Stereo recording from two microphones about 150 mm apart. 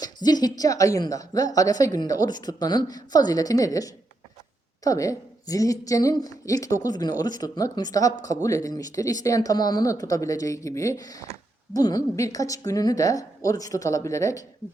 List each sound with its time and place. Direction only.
0.0 s a woman's voice: 25° left (ahead or behind)